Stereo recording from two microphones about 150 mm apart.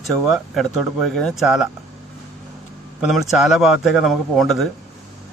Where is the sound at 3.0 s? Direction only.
5° right (ahead or behind).